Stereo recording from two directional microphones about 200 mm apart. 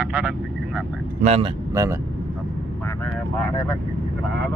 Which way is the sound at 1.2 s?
30° right (ahead or behind).